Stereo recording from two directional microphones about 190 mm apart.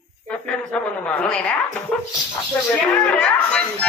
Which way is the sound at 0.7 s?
5° left (ahead or behind).